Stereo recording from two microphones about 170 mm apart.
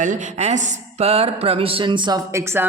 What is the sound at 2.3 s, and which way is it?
Speech, 15° right (ahead or behind).